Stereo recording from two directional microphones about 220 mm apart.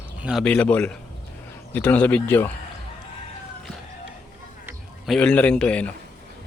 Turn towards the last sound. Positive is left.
turn(degrees=5)  # may be behind; listen again after turning